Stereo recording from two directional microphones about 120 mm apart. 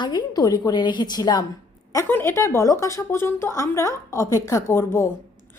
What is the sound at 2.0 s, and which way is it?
A woman's voice, 20° left (ahead or behind).